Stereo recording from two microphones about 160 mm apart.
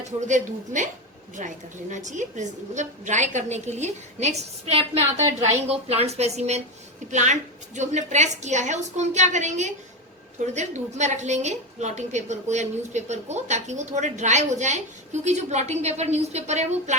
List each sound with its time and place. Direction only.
0.3 s a woman's voice: 50° right (ahead or behind)